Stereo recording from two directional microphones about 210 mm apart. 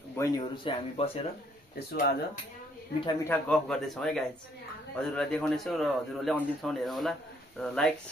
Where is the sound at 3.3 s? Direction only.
5° left (ahead or behind).